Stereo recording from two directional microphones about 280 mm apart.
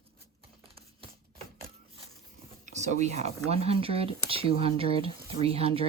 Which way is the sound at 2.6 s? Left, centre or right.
Right.